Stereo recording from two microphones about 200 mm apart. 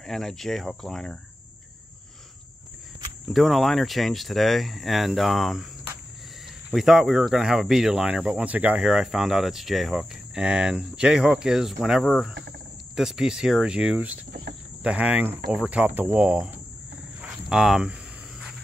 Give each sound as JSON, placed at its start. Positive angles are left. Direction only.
{"t": 0.0, "sound": "speech", "side_deg": 0}
{"t": 3.3, "sound": "speech", "side_deg": 0}
{"t": 6.7, "sound": "speech", "side_deg": 0}
{"t": 14.8, "sound": "cricket", "side_deg": -5}
{"t": 15.5, "sound": "speech", "side_deg": -5}
{"t": 17.2, "sound": "a sound", "side_deg": -5}